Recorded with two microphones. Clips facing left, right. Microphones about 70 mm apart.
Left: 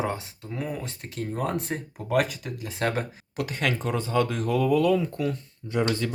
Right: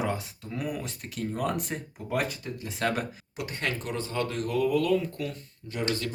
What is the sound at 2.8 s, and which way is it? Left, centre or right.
Speech, left.